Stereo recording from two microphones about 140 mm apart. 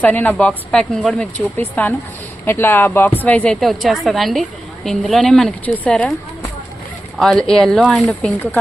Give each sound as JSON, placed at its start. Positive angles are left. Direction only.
{"t": 0.0, "sound": "a woman's voice", "side_deg": 10}
{"t": 7.2, "sound": "a woman's voice", "side_deg": 5}